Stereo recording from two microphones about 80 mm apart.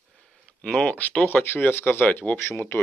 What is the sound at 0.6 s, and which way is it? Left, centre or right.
Speech, centre.